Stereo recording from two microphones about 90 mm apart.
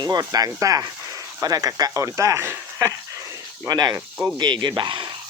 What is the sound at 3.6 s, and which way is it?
Speech, 50° right (ahead or behind).